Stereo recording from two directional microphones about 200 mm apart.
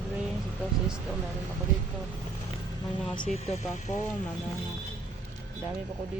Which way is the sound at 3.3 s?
30° left (ahead or behind).